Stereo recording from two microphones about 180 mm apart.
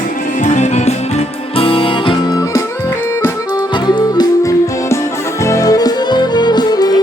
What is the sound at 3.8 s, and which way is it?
Music, 20° left (ahead or behind).